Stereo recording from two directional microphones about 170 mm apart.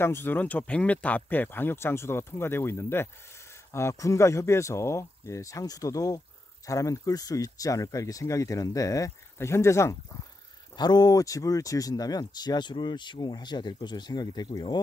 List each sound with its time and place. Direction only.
0.0 s speech: 15° left (ahead or behind)